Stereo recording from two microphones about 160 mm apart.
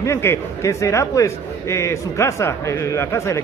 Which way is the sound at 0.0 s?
15° left (ahead or behind).